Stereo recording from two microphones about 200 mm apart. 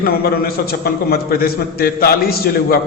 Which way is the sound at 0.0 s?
50° left (ahead or behind).